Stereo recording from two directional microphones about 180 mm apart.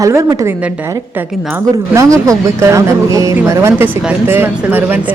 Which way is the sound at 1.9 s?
15° right (ahead or behind).